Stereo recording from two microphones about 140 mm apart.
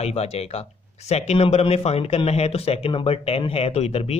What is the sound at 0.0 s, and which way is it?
Speech, 50° left (ahead or behind).